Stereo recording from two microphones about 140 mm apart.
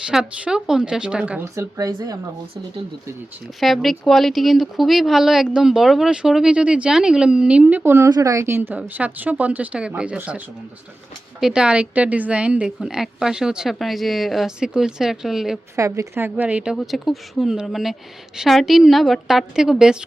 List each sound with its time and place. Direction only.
0.1 s speech: 5° right (ahead or behind)
1.5 s a woman's voice: 25° right (ahead or behind)
3.6 s a woman's voice: centre (ahead or behind)
15.7 s speech: 20° right (ahead or behind); by 20.0 s 5° right (ahead or behind)